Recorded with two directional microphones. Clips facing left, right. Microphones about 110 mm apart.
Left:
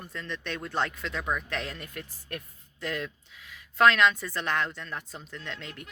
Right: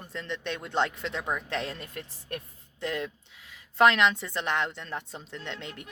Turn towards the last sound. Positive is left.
turn(degrees=-25)  # may be behind; listen again after turning